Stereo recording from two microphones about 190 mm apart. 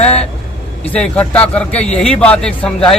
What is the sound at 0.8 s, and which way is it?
Speech, 5° left (ahead or behind).